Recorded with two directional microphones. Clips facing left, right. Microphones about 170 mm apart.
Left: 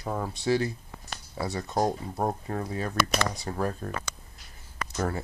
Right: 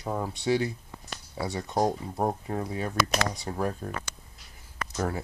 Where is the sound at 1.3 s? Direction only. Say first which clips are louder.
Even; 5° right (ahead or behind).